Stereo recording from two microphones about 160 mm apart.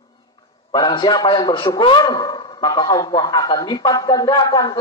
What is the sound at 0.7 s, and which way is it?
A man's voice, 30° left (ahead or behind).